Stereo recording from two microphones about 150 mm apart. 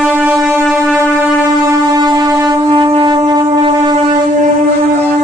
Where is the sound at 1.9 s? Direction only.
25° right (ahead or behind).